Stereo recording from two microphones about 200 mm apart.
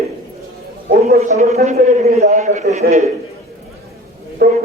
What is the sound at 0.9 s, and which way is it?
A man's voice, 50° right (ahead or behind).